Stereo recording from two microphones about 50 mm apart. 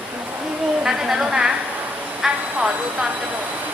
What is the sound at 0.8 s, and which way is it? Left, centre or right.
A woman's voice, centre.